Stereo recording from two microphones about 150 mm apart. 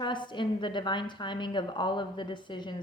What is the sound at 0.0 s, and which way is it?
A woman's voice, 30° left (ahead or behind).